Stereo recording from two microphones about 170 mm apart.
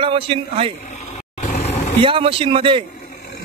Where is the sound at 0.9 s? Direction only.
40° left (ahead or behind).